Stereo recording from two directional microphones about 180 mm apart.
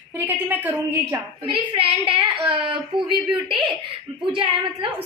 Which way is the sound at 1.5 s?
30° right (ahead or behind).